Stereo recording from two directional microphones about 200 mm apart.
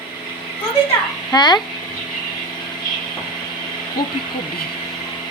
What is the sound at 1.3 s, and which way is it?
Speech, 20° left (ahead or behind).